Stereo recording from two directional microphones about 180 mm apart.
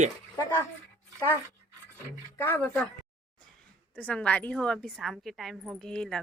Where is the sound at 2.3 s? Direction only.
10° left (ahead or behind).